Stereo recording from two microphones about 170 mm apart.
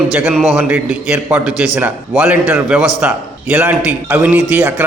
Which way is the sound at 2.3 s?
10° right (ahead or behind).